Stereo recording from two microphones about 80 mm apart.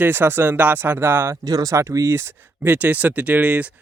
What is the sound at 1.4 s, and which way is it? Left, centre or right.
Speech, right.